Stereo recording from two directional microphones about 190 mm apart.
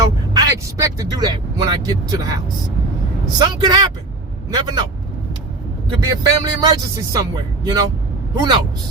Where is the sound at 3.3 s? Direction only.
20° right (ahead or behind).